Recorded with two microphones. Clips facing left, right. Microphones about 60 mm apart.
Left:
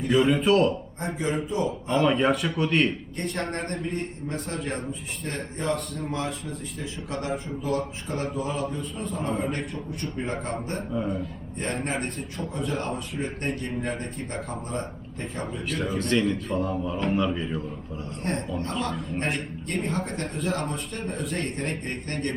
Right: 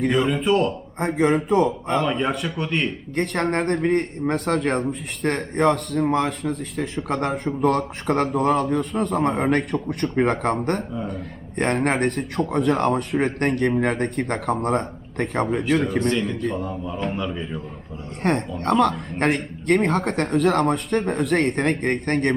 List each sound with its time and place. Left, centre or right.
0.1 s a man's voice: centre
0.9 s a man's voice: right
2.0 s a man's voice: centre
3.2 s a man's voice: right
3.8 s a man's voice: right
10.9 s a man's voice: centre
11.5 s a man's voice: right
16.0 s a man's voice: centre
18.2 s a man's voice: right